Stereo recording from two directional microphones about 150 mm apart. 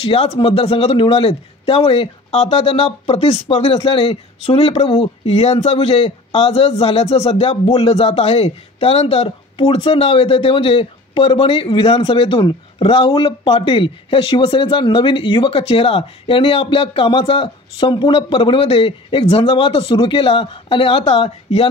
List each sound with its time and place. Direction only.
0.0 s speech: 40° left (ahead or behind)